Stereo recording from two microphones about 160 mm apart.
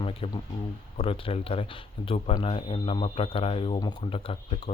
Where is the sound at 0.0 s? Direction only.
35° left (ahead or behind).